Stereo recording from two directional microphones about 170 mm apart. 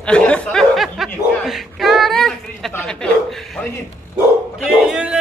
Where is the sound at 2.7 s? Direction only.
5° left (ahead or behind).